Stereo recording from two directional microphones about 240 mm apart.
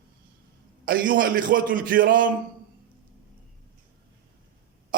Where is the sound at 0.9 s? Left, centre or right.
Right.